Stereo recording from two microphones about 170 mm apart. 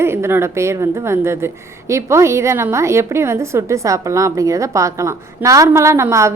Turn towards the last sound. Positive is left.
turn(degrees=-15)  # may be behind; listen again after turning